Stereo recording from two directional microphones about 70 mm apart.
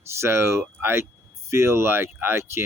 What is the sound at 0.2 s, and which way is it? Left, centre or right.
Speech, right.